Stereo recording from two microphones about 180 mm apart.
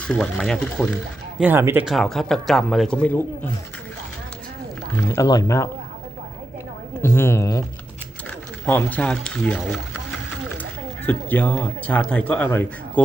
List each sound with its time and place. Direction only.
0.1 s speech: 5° left (ahead or behind)
1.4 s speech: 10° right (ahead or behind); by 3.5 s 10° left (ahead or behind)
4.9 s speech: 15° left (ahead or behind)
7.0 s speech: 15° left (ahead or behind)
8.6 s speech: 10° left (ahead or behind)